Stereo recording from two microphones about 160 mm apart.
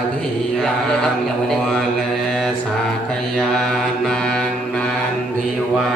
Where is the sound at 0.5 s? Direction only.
5° left (ahead or behind).